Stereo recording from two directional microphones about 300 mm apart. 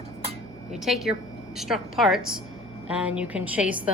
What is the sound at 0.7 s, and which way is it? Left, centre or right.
A woman's voice, centre.